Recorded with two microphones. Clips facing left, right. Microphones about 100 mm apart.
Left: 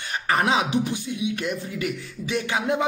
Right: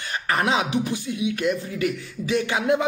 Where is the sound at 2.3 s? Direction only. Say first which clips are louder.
Right 3 dB; 35° left (ahead or behind).